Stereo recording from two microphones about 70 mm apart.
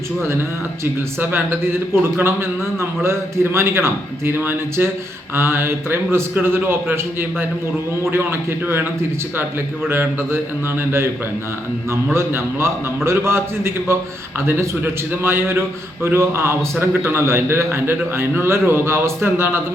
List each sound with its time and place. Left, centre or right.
0.2 s a man's voice: right
9.9 s a man's voice: right
12.1 s a man's voice: right